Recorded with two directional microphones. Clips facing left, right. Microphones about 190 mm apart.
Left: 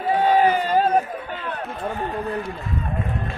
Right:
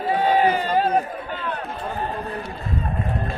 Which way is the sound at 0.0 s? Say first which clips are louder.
Left 1 dB; 35° right (ahead or behind).